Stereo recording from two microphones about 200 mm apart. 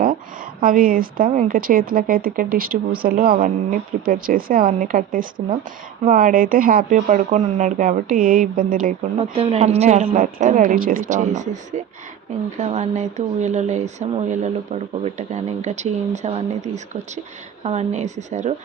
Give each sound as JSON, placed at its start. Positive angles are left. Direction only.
{"t": 0.6, "sound": "speech", "side_deg": -45}
{"t": 9.1, "sound": "speech", "side_deg": -30}